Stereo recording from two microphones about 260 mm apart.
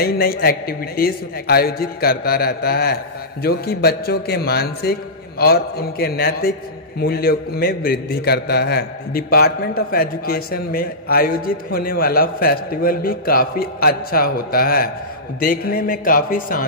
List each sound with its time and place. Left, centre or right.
0.0 s a man's voice: left